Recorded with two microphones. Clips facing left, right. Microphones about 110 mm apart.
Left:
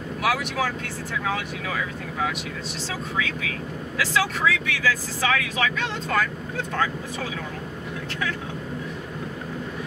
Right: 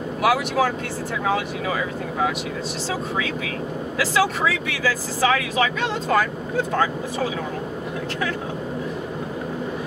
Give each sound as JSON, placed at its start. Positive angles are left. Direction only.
{"t": 0.2, "sound": "speech", "side_deg": -5}
{"t": 1.2, "sound": "speech", "side_deg": -15}